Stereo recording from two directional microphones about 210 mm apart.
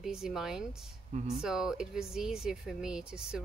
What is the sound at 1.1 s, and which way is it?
Speech, 35° right (ahead or behind).